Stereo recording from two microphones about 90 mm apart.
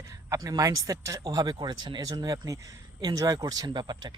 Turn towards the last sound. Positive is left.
turn(degrees=-50)  # may be behind; listen again after turning